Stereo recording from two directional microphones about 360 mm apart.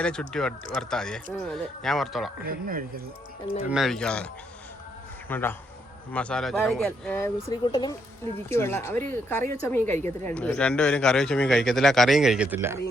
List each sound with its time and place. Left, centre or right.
0.0 s a man's voice: centre
2.5 s speech: right
3.7 s a man's voice: centre
5.3 s a man's voice: centre